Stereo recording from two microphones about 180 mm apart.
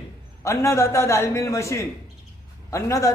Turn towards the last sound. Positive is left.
turn(degrees=15)  # may be behind; listen again after turning